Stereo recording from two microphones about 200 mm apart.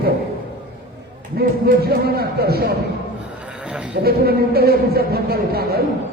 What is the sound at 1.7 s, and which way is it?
Speech, 50° right (ahead or behind).